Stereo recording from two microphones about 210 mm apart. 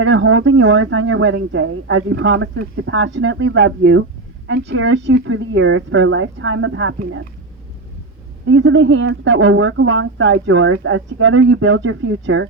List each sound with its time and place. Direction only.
0.0 s speech: 65° right (ahead or behind)
8.4 s speech: 65° right (ahead or behind)